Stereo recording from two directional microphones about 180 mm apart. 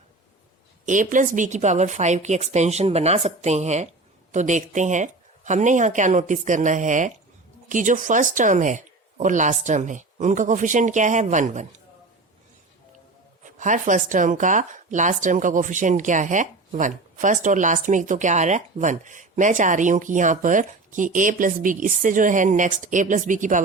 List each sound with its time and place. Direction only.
0.9 s speech: 45° right (ahead or behind)
13.4 s speech: 45° right (ahead or behind)